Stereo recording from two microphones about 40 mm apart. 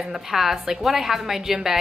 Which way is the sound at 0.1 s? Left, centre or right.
Centre.